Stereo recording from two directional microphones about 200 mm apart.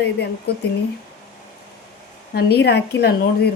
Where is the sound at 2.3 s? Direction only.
50° left (ahead or behind).